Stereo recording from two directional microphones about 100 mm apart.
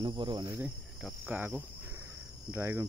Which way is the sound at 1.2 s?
15° right (ahead or behind).